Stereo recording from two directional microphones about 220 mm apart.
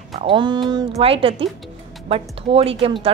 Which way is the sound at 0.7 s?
25° right (ahead or behind).